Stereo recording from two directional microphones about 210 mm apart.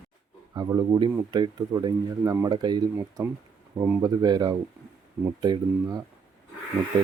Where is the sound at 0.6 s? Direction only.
20° right (ahead or behind).